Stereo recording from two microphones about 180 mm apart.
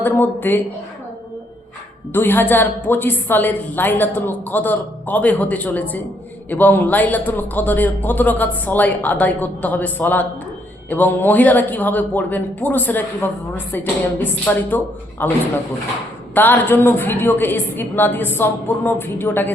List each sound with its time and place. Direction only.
0.0 s a woman's voice: 10° left (ahead or behind)
2.1 s a woman's voice: 10° left (ahead or behind)